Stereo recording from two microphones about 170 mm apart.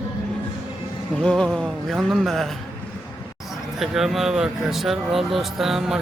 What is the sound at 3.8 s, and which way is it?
Speech, centre (ahead or behind).